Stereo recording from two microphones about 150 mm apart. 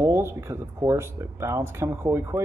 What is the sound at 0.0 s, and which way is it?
Speech, 15° right (ahead or behind).